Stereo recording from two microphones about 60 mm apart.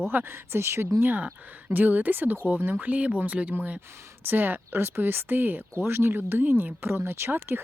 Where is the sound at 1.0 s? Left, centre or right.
Right.